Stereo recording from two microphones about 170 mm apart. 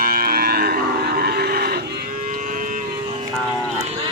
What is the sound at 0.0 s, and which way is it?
Cattle, 60° right (ahead or behind).